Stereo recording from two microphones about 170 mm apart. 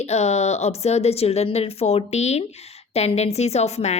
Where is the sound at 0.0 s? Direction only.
40° left (ahead or behind).